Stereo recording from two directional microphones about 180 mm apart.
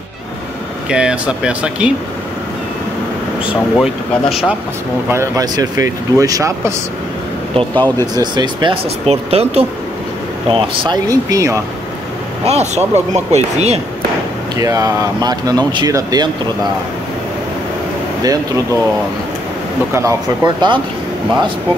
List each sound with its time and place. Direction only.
0.8 s speech: 5° right (ahead or behind)
3.7 s speech: centre (ahead or behind)
5.1 s speech: 15° right (ahead or behind)
12.4 s speech: 35° right (ahead or behind)
14.6 s speech: 20° right (ahead or behind)
18.2 s speech: 20° right (ahead or behind)
19.9 s speech: 15° right (ahead or behind)